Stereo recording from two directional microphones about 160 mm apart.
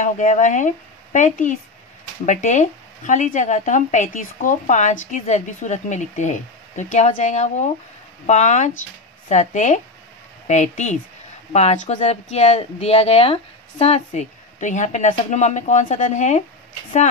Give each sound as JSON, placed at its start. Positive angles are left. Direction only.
{"t": 0.0, "sound": "speech", "side_deg": 50}